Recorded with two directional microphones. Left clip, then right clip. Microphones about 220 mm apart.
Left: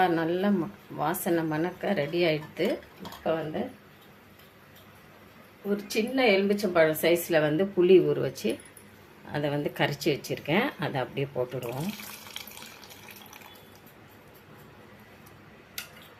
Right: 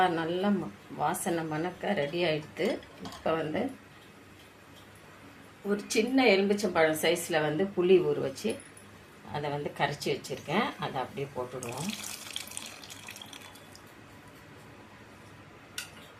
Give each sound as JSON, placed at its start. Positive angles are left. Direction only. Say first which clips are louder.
{"t": 0.0, "sound": "speech", "louder": "left 2 dB", "side_deg": 15}
{"t": 3.2, "sound": "speech", "louder": "left 1 dB", "side_deg": 0}
{"t": 5.6, "sound": "speech", "louder": "even", "side_deg": 5}
{"t": 12.4, "sound": "water", "louder": "right 1 dB", "side_deg": 5}